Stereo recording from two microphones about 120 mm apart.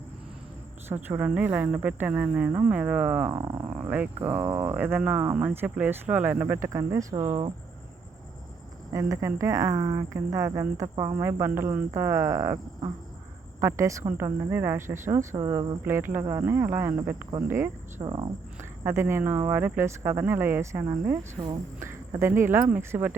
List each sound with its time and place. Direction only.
1.0 s speech: 15° right (ahead or behind)
3.3 s speech: 35° right (ahead or behind)
3.8 s speech: 15° right (ahead or behind)
5.2 s speech: 20° right (ahead or behind)
5.5 s speech: 10° right (ahead or behind); by 7.5 s 40° right (ahead or behind)
8.9 s speech: 25° right (ahead or behind)
18.0 s speech: 40° right (ahead or behind)
18.8 s speech: 20° right (ahead or behind)